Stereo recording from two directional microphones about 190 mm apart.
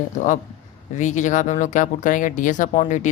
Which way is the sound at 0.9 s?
40° left (ahead or behind).